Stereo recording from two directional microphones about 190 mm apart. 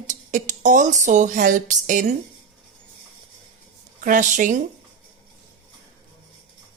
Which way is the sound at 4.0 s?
45° right (ahead or behind).